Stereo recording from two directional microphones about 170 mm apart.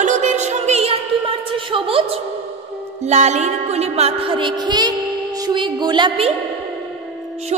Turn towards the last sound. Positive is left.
turn(degrees=-30)  # may be behind; listen again after turning